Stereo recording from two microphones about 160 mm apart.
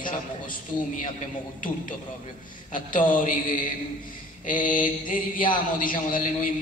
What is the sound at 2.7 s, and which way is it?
A man's voice, 55° left (ahead or behind).